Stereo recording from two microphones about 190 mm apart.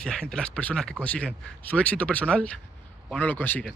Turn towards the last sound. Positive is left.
turn(degrees=10)  # may be behind; listen again after turning